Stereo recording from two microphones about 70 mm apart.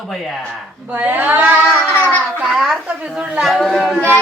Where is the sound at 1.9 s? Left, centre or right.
Left.